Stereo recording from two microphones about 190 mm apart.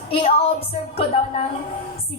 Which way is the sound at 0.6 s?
30° left (ahead or behind).